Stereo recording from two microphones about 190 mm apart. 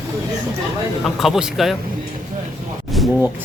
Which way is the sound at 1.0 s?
Centre (ahead or behind).